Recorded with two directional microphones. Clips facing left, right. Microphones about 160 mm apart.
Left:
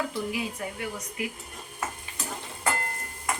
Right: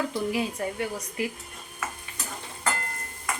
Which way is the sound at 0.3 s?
35° right (ahead or behind).